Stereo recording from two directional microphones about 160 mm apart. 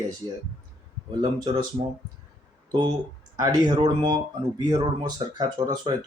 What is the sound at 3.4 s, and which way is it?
Speech, 25° right (ahead or behind).